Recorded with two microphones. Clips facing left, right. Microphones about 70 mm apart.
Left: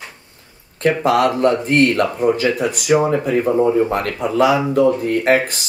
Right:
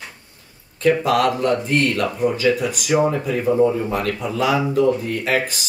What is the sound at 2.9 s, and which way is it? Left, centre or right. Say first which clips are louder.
Speech: left 2 dB; left.